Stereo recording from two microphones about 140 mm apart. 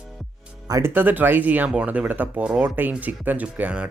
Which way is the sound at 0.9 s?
15° right (ahead or behind).